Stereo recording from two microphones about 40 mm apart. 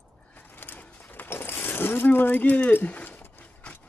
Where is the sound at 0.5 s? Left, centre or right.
Left.